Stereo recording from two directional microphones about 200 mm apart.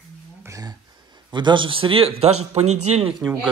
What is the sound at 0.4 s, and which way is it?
Speech, 15° right (ahead or behind).